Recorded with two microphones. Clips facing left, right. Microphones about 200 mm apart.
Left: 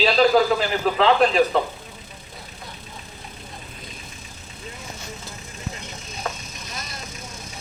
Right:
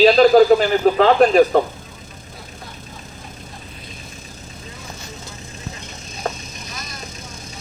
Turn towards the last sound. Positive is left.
turn(degrees=-30)  # may be behind; listen again after turning